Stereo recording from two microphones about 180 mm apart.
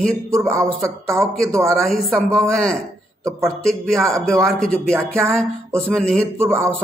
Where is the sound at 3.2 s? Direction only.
15° right (ahead or behind).